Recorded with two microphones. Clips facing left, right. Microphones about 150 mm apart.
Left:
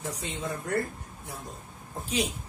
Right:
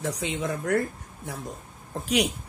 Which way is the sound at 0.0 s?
85° right.